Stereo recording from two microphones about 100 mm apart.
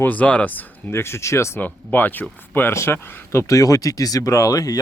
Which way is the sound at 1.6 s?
15° left (ahead or behind).